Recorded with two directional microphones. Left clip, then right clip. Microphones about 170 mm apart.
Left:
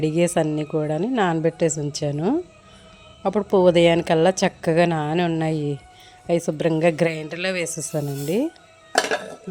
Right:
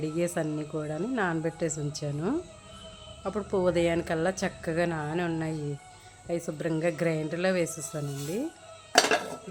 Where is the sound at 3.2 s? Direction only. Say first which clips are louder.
Left 11 dB; 35° left (ahead or behind).